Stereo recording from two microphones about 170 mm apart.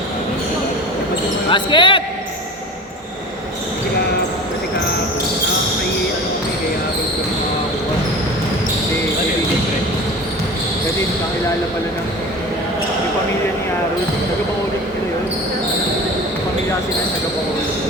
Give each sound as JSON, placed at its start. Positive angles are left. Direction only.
{"t": 1.5, "sound": "speech", "side_deg": 25}